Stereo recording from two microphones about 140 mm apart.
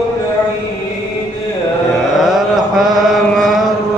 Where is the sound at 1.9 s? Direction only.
5° right (ahead or behind).